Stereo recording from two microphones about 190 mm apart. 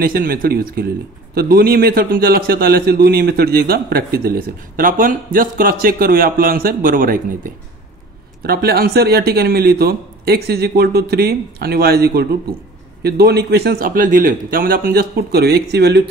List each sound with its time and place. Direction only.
0.0 s a man's voice: 50° right (ahead or behind)
8.4 s speech: 55° right (ahead or behind)